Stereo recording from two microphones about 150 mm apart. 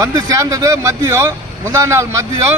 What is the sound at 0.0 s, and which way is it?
Speech, 20° right (ahead or behind).